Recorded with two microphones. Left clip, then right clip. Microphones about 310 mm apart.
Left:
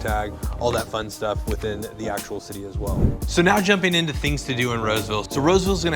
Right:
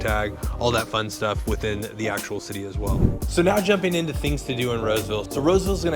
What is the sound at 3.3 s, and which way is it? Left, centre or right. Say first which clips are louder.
Speech: left 2 dB; left.